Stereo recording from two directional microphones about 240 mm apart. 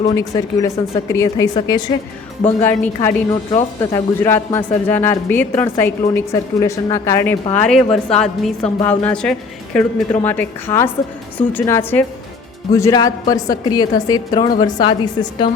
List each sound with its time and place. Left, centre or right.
0.1 s a man's voice: centre